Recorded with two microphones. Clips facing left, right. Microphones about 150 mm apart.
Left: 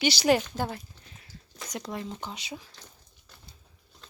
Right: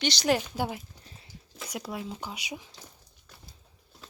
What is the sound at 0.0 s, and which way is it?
Speech, 5° left (ahead or behind).